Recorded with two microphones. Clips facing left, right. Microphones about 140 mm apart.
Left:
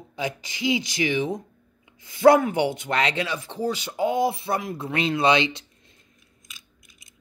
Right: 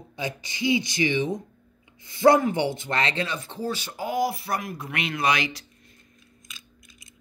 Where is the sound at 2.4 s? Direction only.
10° left (ahead or behind).